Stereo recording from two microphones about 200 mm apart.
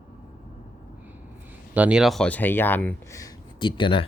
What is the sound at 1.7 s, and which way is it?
Speech, 5° right (ahead or behind).